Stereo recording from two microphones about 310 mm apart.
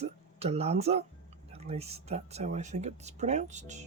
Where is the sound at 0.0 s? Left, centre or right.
Centre.